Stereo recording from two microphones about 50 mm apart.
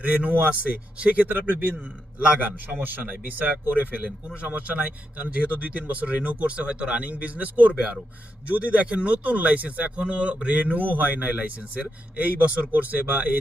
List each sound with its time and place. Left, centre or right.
0.0 s a man's voice: right
1.3 s a man's voice: right